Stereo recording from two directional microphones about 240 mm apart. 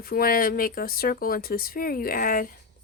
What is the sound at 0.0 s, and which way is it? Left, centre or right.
Speech, left.